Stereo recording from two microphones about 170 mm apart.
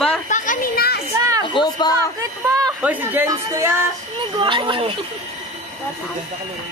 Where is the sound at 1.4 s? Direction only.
25° left (ahead or behind).